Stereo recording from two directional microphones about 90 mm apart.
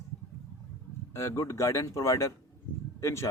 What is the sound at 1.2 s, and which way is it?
Speech, 30° left (ahead or behind).